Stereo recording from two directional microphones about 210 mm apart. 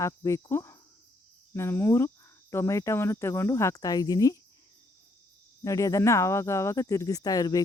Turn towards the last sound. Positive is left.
turn(degrees=15)  # may be behind; listen again after turning